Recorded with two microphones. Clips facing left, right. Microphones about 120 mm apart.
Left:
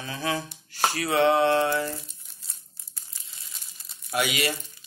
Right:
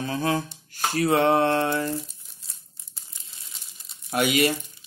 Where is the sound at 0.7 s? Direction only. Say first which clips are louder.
Right 3 dB; 45° right (ahead or behind).